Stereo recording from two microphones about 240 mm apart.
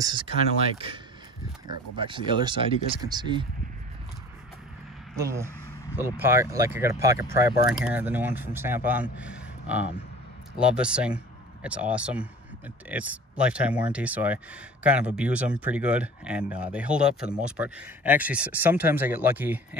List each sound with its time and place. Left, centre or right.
0.0 s speech: centre
2.0 s speech: right
5.1 s speech: centre